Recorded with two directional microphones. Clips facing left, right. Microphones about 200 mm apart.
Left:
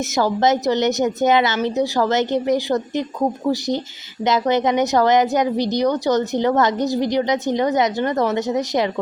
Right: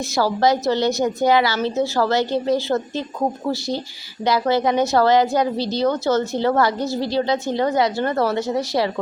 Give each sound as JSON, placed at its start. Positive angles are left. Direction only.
{"t": 0.1, "sound": "a woman's voice", "side_deg": 20}
{"t": 4.2, "sound": "a woman's voice", "side_deg": 20}